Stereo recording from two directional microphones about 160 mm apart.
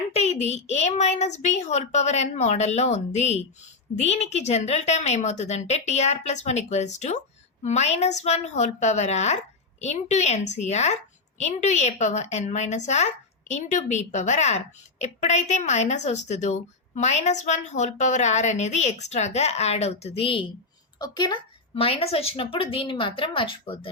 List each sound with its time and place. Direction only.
0.1 s a woman's voice: 40° left (ahead or behind)